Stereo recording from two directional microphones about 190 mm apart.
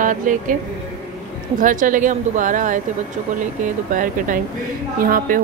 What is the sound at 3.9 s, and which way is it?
A woman's voice, 45° right (ahead or behind).